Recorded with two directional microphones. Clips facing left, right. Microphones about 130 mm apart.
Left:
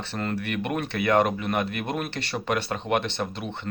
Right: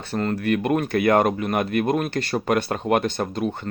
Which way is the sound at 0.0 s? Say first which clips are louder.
Right 5 dB; 40° right (ahead or behind).